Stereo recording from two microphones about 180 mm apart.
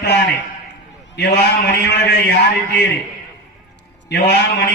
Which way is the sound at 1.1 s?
70° left (ahead or behind).